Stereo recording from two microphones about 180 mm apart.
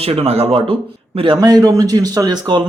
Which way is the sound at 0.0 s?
35° right (ahead or behind).